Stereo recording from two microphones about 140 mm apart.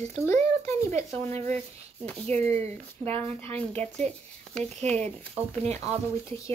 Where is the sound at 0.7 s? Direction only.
20° left (ahead or behind).